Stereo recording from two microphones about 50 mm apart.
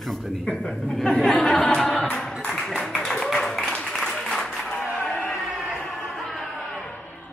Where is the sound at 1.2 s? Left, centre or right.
Centre.